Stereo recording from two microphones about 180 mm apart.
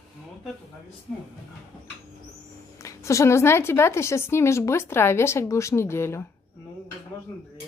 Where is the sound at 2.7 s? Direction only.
15° left (ahead or behind).